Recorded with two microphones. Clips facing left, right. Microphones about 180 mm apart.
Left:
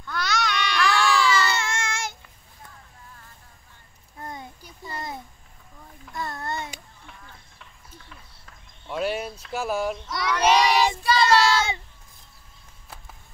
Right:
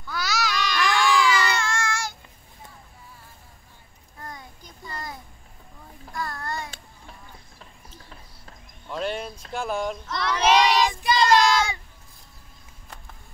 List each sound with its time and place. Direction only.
0.0 s babbling: 5° right (ahead or behind)
0.7 s baby cry: 15° right (ahead or behind)
1.5 s child singing: 20° left (ahead or behind)
4.2 s a sound: 25° left (ahead or behind)
6.1 s child singing: 25° left (ahead or behind)
8.8 s a sound: 5° left (ahead or behind)
9.5 s speech: 5° left (ahead or behind)
10.0 s child singing: 10° left (ahead or behind)
11.0 s child singing: 15° right (ahead or behind)